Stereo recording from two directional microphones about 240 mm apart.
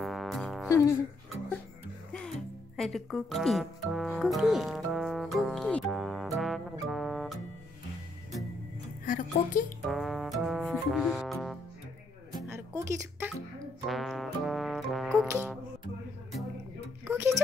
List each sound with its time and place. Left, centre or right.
0.0 s music: centre
0.7 s speech: centre
2.8 s music: centre
9.0 s a woman's voice: left
9.8 s music: centre
12.4 s music: centre
13.8 s brass instrument: centre
15.2 s music: centre
17.1 s a sound: centre